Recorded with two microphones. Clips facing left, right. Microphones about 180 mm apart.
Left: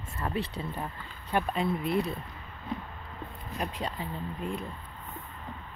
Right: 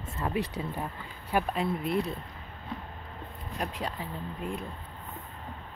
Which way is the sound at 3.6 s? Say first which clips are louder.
Even; centre (ahead or behind).